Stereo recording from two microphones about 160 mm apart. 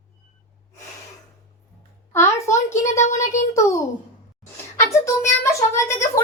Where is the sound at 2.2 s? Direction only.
20° left (ahead or behind).